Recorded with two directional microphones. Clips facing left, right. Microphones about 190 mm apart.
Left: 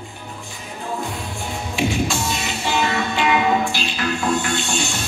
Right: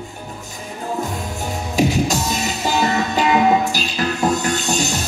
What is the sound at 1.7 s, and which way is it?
Music, 40° right (ahead or behind).